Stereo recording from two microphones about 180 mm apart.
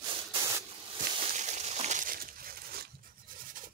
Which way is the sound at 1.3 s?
40° right (ahead or behind).